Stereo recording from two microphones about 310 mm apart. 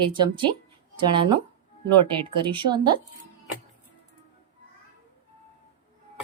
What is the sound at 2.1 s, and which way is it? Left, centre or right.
Speech, centre.